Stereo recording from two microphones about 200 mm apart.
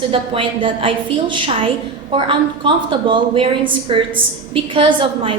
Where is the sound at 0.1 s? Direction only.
25° right (ahead or behind).